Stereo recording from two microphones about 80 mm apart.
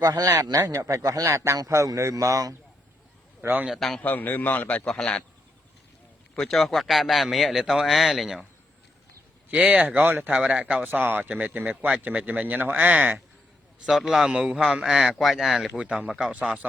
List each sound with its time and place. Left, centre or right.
0.0 s a man's voice: right
3.4 s speech: right
3.7 s speech: centre
4.0 s a man's voice: left
4.9 s a man's voice: centre
6.3 s speech: centre
9.6 s speech: centre
10.3 s speech: centre
13.8 s a man's voice: centre
15.8 s a man's voice: centre
16.3 s a man's voice: centre